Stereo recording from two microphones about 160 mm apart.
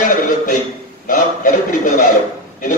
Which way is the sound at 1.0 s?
55° left (ahead or behind).